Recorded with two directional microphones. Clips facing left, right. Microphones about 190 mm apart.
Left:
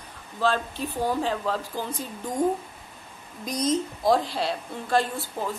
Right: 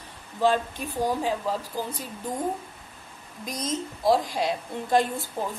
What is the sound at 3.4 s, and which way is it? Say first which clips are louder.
Speech: left 5 dB; centre (ahead or behind).